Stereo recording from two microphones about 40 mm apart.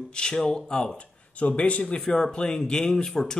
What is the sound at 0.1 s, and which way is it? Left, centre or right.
Speech, left.